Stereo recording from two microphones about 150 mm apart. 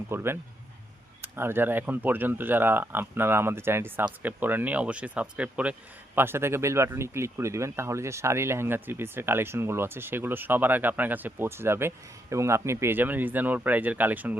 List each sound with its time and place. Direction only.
0.1 s speech: 15° right (ahead or behind)